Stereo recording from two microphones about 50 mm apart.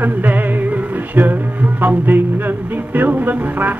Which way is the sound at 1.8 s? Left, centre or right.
Right.